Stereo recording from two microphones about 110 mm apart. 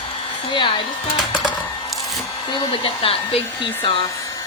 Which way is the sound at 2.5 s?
55° left (ahead or behind).